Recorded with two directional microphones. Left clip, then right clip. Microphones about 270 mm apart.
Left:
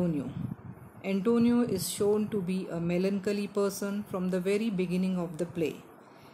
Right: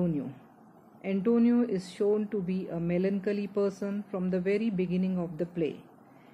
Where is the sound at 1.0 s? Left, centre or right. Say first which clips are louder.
Even; centre.